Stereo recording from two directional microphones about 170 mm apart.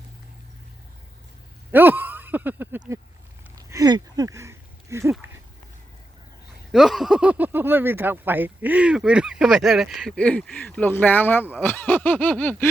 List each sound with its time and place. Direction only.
1.7 s speech: 10° right (ahead or behind)
3.7 s a sound: 20° right (ahead or behind)
6.7 s speech: centre (ahead or behind)
11.5 s snicker: 10° left (ahead or behind)